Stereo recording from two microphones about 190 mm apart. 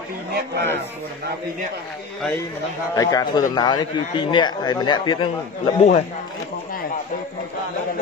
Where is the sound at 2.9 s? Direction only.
20° left (ahead or behind).